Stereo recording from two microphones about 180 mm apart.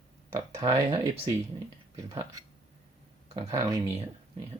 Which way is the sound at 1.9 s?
15° right (ahead or behind).